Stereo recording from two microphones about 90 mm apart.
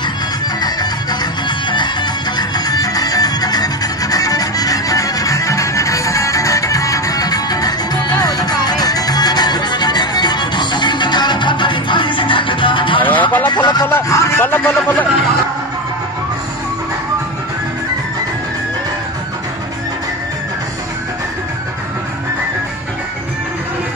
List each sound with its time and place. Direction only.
1.7 s music: 55° left (ahead or behind)
13.1 s vehicle: 20° left (ahead or behind)
13.5 s vehicle: 55° left (ahead or behind)
14.0 s vehicle: 35° left (ahead or behind)
14.4 s a sound: 25° left (ahead or behind)